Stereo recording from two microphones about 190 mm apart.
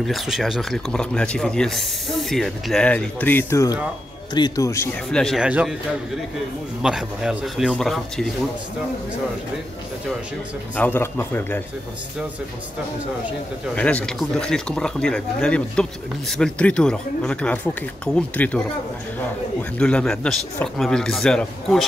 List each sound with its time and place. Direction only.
0.0 s speech: centre (ahead or behind); by 4.8 s 15° left (ahead or behind)
5.1 s speech: centre (ahead or behind)
6.8 s speech: 5° right (ahead or behind)
10.8 s speech: 10° left (ahead or behind)
13.7 s speech: 5° left (ahead or behind)
19.8 s speech: 5° left (ahead or behind)